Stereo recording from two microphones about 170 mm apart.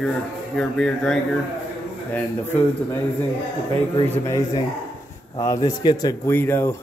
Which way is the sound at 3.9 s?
25° left (ahead or behind).